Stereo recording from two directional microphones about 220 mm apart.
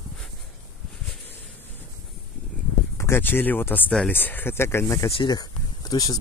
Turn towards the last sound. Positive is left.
turn(degrees=15)  # may be behind; listen again after turning